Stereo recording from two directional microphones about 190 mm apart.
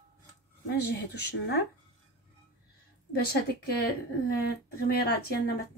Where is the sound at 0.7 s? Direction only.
60° left (ahead or behind).